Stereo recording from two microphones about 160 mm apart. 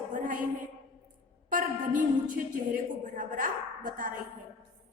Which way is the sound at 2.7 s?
55° right (ahead or behind).